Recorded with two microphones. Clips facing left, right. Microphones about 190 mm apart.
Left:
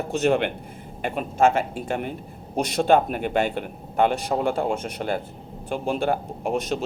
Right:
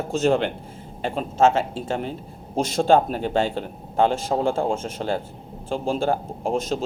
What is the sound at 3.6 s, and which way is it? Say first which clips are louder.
Speech: right 1 dB; 15° left (ahead or behind).